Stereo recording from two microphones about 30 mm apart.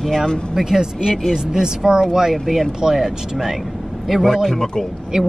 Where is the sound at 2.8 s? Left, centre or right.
Centre.